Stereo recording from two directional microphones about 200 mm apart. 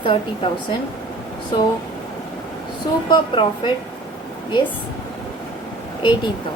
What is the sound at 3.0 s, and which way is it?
Speech, 25° left (ahead or behind).